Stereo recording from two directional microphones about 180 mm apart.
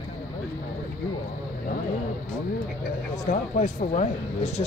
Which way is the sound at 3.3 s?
45° left (ahead or behind).